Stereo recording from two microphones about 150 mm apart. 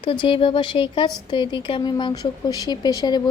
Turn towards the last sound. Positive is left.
turn(degrees=25)  # may be behind; listen again after turning